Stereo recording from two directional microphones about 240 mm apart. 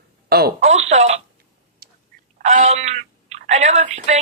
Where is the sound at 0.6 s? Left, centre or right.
Right.